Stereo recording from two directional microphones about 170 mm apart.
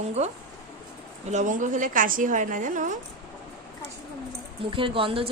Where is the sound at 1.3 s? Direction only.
45° right (ahead or behind).